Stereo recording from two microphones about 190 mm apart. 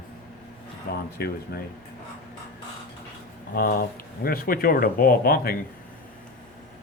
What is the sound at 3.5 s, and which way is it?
Speech, 50° left (ahead or behind).